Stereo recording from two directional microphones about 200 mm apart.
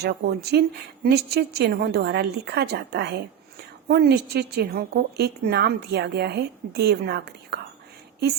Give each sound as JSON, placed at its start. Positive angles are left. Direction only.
{"t": 0.0, "sound": "a woman's voice", "side_deg": -55}